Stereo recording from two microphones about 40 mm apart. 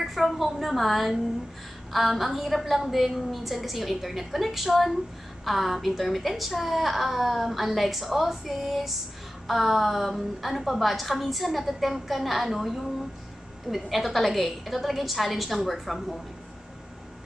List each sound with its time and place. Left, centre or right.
0.0 s a woman's voice: centre